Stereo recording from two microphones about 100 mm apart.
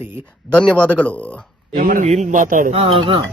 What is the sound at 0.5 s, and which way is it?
Speech, 10° left (ahead or behind).